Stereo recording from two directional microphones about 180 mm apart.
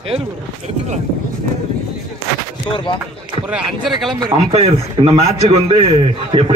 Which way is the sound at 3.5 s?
Centre (ahead or behind).